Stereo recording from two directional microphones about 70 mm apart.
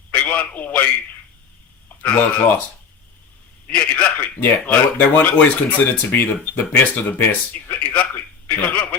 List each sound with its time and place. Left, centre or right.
0.1 s a sound: left
2.0 s speech: left
3.7 s speech: centre